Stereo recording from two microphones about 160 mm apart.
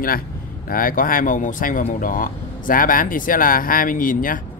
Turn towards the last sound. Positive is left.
turn(degrees=60)  # may be behind; listen again after turning